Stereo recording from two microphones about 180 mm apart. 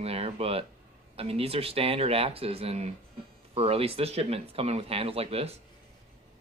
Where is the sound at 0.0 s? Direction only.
35° right (ahead or behind).